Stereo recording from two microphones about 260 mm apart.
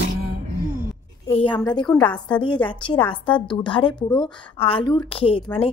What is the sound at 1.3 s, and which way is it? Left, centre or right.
A woman's voice, left.